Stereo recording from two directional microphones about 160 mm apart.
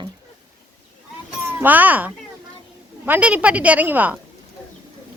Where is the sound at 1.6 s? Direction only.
10° right (ahead or behind).